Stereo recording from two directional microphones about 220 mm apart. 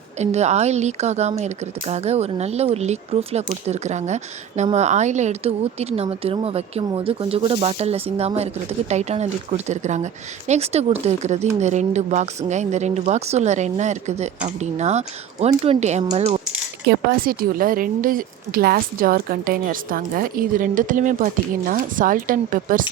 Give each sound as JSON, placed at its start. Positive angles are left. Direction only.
{"t": 0.2, "sound": "a woman's voice", "side_deg": -30}
{"t": 16.8, "sound": "a woman's voice", "side_deg": -45}